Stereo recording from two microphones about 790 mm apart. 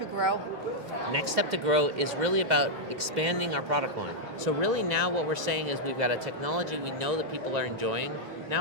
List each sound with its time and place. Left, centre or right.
1.1 s speech: right